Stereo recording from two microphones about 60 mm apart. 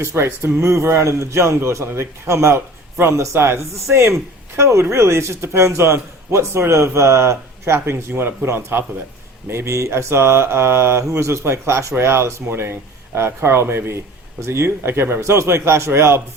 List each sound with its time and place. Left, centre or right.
0.0 s a man's voice: right
3.0 s a man's voice: right
9.5 s a man's voice: right